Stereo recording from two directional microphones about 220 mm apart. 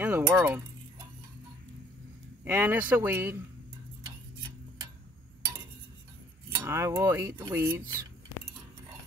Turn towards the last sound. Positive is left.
turn(degrees=-10)  # may be behind; listen again after turning